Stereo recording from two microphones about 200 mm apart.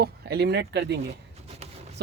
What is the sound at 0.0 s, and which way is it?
Speech, 55° right (ahead or behind).